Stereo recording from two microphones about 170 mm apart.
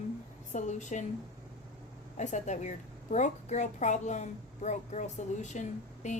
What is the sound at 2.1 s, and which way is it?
A woman's voice, 45° left (ahead or behind).